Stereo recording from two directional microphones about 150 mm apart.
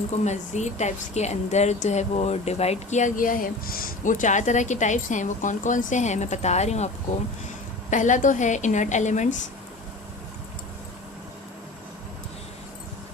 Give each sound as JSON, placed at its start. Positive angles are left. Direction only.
{"t": 0.1, "sound": "speech", "side_deg": 50}